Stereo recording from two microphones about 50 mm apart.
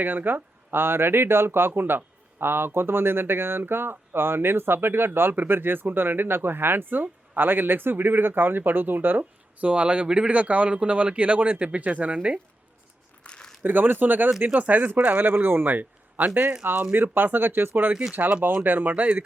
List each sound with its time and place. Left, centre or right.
0.0 s speech: right
9.6 s speech: right
13.2 s crumpling: left
13.6 s speech: right
18.1 s speech: right
18.4 s speech: right